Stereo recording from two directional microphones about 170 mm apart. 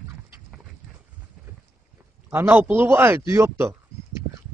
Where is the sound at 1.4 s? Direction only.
5° right (ahead or behind).